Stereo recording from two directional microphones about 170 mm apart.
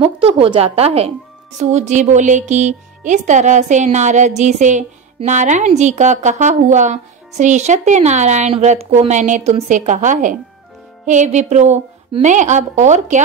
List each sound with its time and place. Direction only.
0.0 s a woman's voice: 35° right (ahead or behind)